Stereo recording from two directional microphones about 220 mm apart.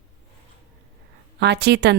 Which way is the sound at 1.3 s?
50° right (ahead or behind).